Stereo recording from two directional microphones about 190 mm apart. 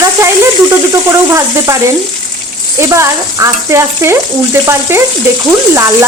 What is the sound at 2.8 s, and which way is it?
Speech, 15° right (ahead or behind).